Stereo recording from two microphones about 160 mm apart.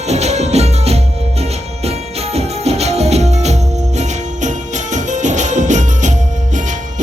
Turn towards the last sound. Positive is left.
turn(degrees=-50)  # may be behind; listen again after turning